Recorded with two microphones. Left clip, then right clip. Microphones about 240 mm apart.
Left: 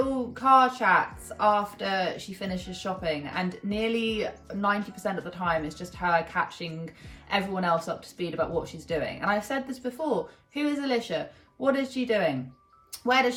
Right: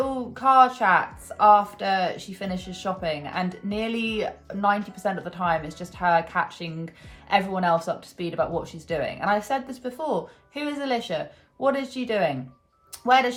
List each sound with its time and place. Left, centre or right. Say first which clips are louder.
0.3 s speech: right 3 dB; centre